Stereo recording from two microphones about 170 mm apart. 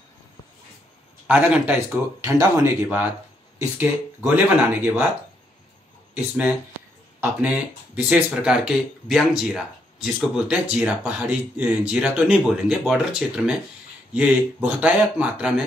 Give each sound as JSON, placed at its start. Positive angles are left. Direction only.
{"t": 1.2, "sound": "a man's voice", "side_deg": -10}
{"t": 4.2, "sound": "speech", "side_deg": -10}
{"t": 6.1, "sound": "speech", "side_deg": -10}